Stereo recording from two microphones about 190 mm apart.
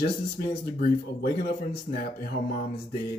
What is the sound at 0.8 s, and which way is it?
Speech, 50° left (ahead or behind).